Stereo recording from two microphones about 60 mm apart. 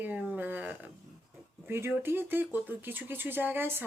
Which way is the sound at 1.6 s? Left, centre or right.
Right.